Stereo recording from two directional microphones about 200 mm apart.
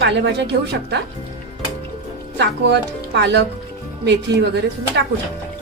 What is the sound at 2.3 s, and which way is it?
Speech, 60° right (ahead or behind).